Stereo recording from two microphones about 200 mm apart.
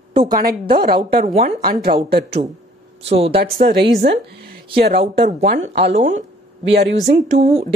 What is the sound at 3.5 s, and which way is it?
A woman's voice, 50° right (ahead or behind).